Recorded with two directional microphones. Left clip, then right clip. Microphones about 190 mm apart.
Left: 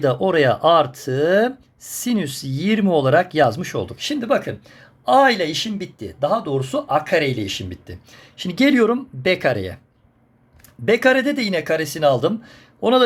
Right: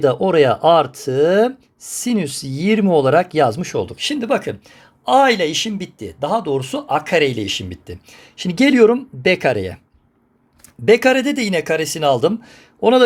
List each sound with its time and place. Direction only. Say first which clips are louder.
0.0 s speech: right 3 dB; 15° right (ahead or behind)
10.8 s a man's voice: right 3 dB; 30° right (ahead or behind)